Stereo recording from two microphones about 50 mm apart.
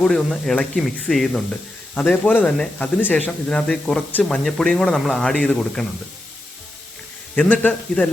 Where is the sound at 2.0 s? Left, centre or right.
Left.